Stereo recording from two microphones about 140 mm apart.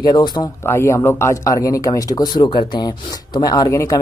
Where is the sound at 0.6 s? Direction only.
20° left (ahead or behind).